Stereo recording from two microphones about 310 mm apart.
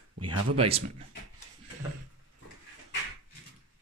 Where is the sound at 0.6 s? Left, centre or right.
Centre.